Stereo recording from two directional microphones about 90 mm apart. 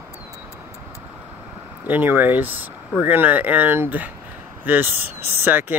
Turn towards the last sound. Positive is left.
turn(degrees=-20)  # may be behind; listen again after turning